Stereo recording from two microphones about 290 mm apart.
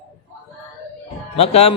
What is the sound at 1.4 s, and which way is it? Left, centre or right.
Speech, left.